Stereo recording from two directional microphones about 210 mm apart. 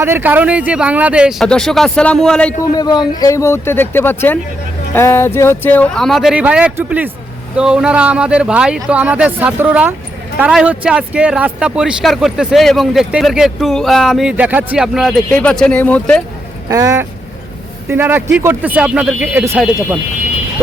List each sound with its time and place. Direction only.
0.0 s speech: 10° right (ahead or behind)
2.7 s speech: 20° left (ahead or behind)
16.6 s speech: 15° right (ahead or behind)